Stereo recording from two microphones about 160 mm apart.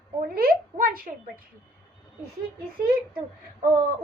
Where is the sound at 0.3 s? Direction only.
70° right (ahead or behind).